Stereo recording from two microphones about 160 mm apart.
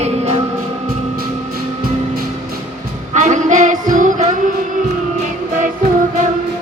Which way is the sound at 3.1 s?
50° right (ahead or behind).